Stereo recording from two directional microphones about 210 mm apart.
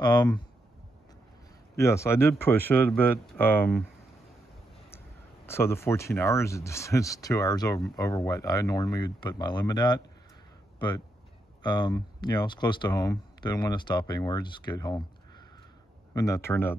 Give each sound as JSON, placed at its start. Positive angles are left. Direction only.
{"t": 0.0, "sound": "speech", "side_deg": 20}
{"t": 1.8, "sound": "speech", "side_deg": 15}
{"t": 5.5, "sound": "speech", "side_deg": 10}
{"t": 11.6, "sound": "speech", "side_deg": 20}